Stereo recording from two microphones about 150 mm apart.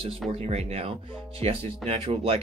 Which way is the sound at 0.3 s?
40° right (ahead or behind).